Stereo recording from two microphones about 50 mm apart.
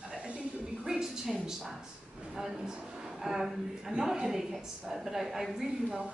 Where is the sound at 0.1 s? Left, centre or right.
Centre.